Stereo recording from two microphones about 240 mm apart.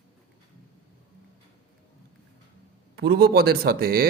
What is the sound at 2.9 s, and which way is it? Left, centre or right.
Speech, right.